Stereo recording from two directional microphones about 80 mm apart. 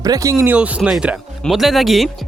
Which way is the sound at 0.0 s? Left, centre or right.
Right.